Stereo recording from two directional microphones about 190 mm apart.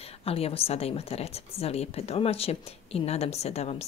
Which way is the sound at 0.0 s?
30° left (ahead or behind).